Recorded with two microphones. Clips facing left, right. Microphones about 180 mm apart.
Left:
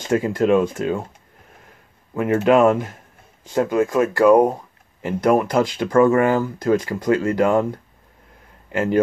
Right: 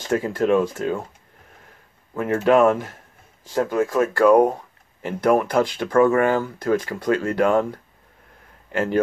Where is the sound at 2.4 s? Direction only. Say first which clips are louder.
Left 1 dB; 10° left (ahead or behind).